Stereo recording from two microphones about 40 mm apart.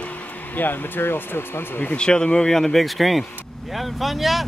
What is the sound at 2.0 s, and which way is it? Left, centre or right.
Speech, left.